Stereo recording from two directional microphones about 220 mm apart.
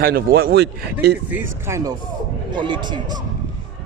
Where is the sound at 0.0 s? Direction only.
45° right (ahead or behind).